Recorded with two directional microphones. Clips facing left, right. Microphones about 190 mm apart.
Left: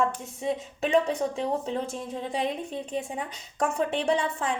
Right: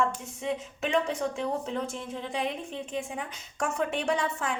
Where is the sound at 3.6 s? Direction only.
30° left (ahead or behind).